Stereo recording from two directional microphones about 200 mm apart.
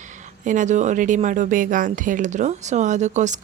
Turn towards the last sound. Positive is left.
turn(degrees=-35)  # may be behind; listen again after turning